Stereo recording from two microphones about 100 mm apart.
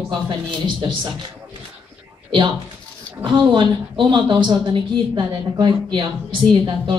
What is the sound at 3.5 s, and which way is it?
Speech, 50° right (ahead or behind).